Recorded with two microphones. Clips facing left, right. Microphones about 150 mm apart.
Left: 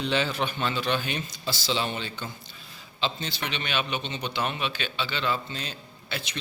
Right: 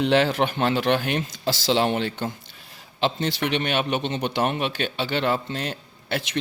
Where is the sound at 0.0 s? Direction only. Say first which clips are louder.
Right 7 dB; 80° right.